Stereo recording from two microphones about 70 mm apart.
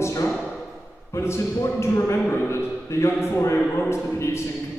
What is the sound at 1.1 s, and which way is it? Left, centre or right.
A man's voice, left.